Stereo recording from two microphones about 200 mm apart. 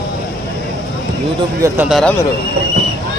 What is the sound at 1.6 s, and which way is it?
Speech, 10° right (ahead or behind).